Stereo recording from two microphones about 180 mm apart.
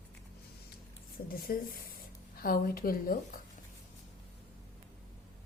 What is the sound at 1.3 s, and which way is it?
A woman's voice, 55° left (ahead or behind).